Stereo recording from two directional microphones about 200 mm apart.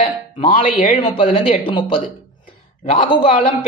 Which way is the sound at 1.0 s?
30° left (ahead or behind).